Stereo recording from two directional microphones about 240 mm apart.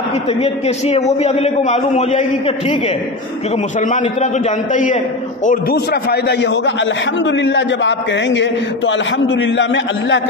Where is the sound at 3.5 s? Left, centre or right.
Left.